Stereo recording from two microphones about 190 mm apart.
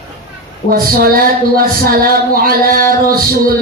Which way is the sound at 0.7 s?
50° right (ahead or behind).